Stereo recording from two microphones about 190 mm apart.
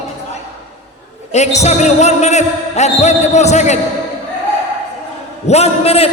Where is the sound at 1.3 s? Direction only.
35° left (ahead or behind).